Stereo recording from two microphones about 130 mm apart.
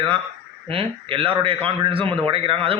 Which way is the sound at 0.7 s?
45° right (ahead or behind).